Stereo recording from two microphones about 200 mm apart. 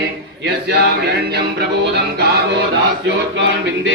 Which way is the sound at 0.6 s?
55° right (ahead or behind).